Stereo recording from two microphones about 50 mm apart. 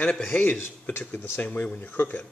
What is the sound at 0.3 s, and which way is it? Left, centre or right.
Speech, left.